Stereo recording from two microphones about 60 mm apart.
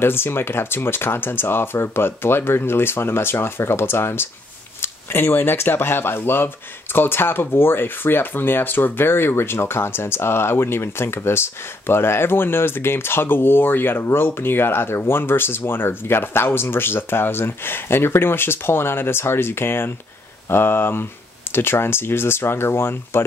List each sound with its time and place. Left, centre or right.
0.0 s speech: left